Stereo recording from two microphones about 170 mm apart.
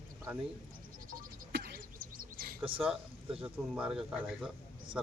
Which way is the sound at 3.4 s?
5° right (ahead or behind).